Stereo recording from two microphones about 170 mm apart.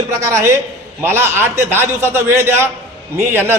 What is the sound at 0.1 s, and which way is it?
A man's voice, 15° right (ahead or behind).